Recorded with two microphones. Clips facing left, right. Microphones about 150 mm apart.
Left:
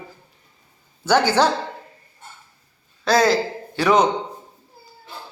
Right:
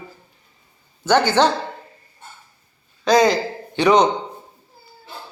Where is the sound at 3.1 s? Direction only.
5° left (ahead or behind).